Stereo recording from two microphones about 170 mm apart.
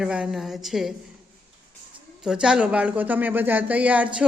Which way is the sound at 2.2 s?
5° right (ahead or behind).